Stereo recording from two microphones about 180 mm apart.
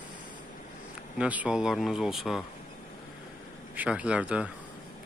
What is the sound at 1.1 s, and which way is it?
Speech, 5° right (ahead or behind).